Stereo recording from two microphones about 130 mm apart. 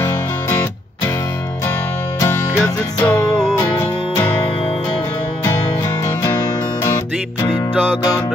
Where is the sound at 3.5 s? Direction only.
20° left (ahead or behind).